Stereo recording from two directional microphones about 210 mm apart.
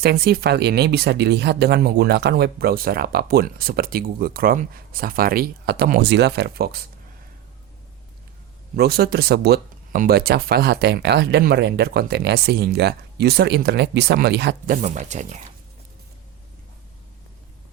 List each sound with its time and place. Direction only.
0.0 s speech: 50° right (ahead or behind)
8.7 s speech: 50° right (ahead or behind)
14.8 s speech: 35° right (ahead or behind)